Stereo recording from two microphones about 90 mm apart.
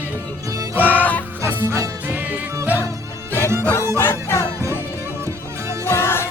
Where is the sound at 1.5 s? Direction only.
20° right (ahead or behind).